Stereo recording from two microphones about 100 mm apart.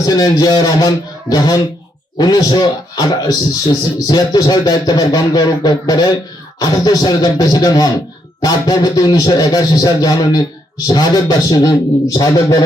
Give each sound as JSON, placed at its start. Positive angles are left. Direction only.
{"t": 0.0, "sound": "a man's voice", "side_deg": 40}